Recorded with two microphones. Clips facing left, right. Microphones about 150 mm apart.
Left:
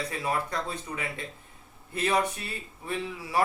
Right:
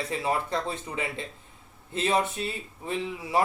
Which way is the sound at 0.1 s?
25° right (ahead or behind).